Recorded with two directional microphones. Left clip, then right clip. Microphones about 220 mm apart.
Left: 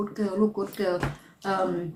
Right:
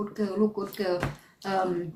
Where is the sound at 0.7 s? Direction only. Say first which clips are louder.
Left 1 dB; centre (ahead or behind).